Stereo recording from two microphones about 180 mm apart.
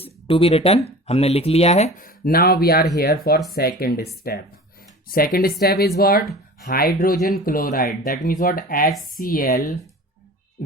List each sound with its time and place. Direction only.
0.0 s speech: 30° left (ahead or behind); by 8.9 s 55° left (ahead or behind)
8.9 s speech: centre (ahead or behind)
9.1 s speech: 50° left (ahead or behind)